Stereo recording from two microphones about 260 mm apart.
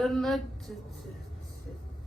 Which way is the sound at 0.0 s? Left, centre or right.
Centre.